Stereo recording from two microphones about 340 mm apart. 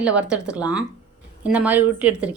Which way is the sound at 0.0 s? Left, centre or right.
Centre.